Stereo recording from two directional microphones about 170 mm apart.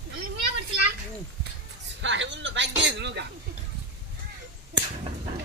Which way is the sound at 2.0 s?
90° right.